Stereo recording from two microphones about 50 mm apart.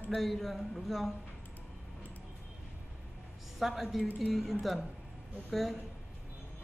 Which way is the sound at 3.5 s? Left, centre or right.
Centre.